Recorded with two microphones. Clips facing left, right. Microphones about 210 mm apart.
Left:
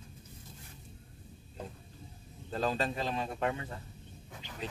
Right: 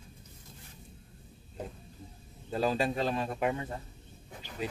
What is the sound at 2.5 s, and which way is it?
Speech, 10° right (ahead or behind).